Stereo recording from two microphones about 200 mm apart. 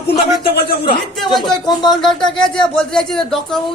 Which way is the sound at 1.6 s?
20° left (ahead or behind).